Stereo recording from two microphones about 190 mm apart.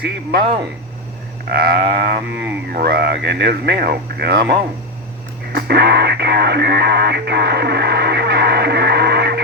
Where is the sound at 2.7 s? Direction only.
55° right (ahead or behind).